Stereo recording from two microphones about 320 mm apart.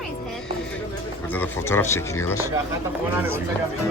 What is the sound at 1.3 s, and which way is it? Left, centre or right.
Speech, centre.